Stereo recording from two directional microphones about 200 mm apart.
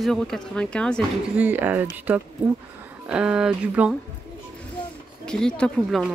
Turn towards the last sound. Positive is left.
turn(degrees=5)  # may be behind; listen again after turning